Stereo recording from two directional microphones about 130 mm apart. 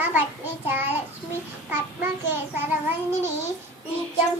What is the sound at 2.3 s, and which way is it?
Child singing, 15° right (ahead or behind).